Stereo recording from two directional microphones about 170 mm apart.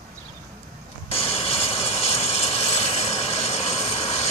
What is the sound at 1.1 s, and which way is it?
Vehicle, 35° left (ahead or behind).